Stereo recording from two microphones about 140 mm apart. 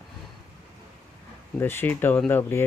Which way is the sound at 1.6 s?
15° left (ahead or behind).